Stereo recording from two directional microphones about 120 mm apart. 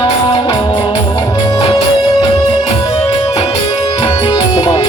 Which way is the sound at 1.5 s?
50° left (ahead or behind).